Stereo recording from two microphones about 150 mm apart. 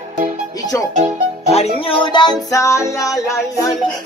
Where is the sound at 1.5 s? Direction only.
40° left (ahead or behind).